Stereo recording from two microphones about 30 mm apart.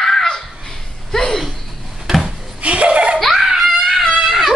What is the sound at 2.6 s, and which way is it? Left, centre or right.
Chuckle, right.